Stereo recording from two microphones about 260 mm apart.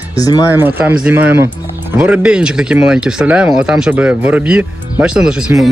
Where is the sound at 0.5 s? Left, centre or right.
Centre.